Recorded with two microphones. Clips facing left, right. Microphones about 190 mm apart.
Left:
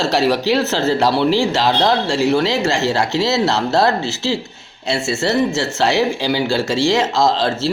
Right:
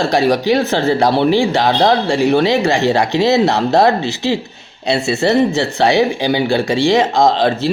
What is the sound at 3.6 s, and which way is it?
Speech, 15° right (ahead or behind).